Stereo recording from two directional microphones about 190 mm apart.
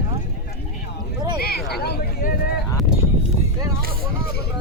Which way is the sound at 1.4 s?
55° left (ahead or behind).